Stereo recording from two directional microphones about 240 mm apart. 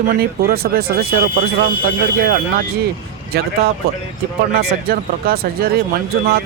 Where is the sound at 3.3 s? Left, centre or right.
Right.